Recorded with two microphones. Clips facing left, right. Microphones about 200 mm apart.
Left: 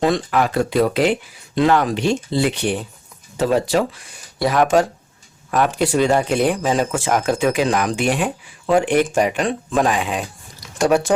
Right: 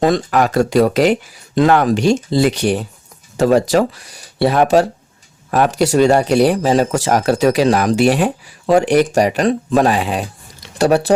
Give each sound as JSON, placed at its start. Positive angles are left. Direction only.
{"t": 0.0, "sound": "speech", "side_deg": -45}